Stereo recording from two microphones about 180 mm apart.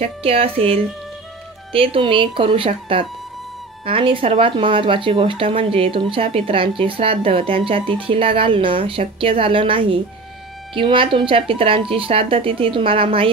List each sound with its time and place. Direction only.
0.0 s speech: 35° right (ahead or behind)